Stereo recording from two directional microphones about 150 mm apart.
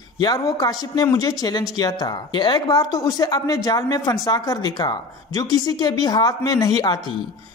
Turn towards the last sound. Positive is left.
turn(degrees=25)  # may be behind; listen again after turning